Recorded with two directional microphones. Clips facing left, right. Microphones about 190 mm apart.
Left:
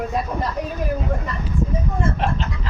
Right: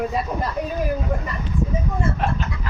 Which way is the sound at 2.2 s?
30° left (ahead or behind).